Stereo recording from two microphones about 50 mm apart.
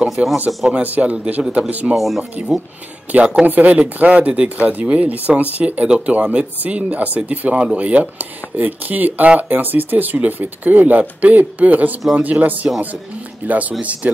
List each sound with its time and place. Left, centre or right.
0.0 s speech: centre
0.5 s speech: centre
0.8 s speech: right
2.0 s speech: centre
3.1 s speech: right
3.4 s speech: right
3.7 s speech: right